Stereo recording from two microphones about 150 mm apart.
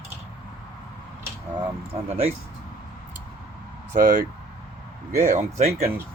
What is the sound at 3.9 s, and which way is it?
Speech, 60° right (ahead or behind).